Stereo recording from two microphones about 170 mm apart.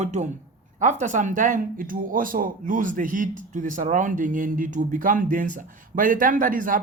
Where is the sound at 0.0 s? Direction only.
40° right (ahead or behind).